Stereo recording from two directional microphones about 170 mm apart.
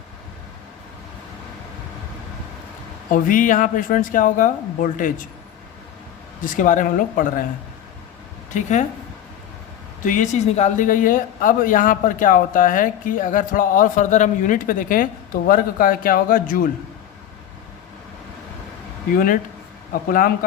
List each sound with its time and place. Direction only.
3.1 s speech: 55° left (ahead or behind)
6.4 s speech: 50° left (ahead or behind)
8.5 s speech: 45° left (ahead or behind)
10.0 s speech: 50° left (ahead or behind)
19.1 s speech: 55° left (ahead or behind)